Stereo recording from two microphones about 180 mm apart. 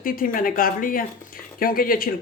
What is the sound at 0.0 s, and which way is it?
Speech, 50° left (ahead or behind).